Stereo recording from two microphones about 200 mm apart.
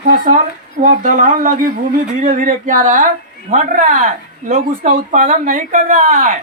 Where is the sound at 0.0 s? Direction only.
40° right (ahead or behind).